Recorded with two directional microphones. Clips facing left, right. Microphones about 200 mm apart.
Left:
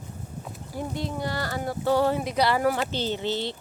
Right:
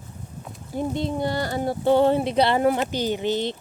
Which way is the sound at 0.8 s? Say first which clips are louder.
Right 6 dB; 25° right (ahead or behind).